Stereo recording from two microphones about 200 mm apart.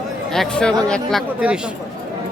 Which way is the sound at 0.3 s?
5° left (ahead or behind).